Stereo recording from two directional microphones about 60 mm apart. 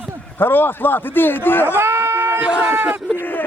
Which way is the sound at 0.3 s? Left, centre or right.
Left.